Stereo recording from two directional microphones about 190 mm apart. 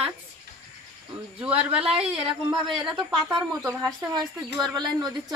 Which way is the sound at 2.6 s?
5° right (ahead or behind).